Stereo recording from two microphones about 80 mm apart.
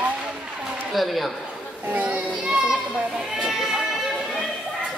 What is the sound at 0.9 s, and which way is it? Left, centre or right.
Speech, centre.